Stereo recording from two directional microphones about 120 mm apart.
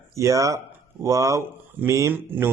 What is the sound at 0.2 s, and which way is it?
A man's voice, 25° right (ahead or behind).